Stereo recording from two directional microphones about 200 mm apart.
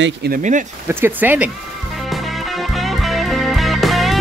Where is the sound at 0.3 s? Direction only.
40° right (ahead or behind).